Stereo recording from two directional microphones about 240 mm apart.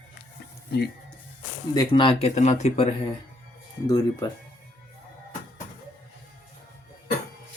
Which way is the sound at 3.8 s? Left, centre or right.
Centre.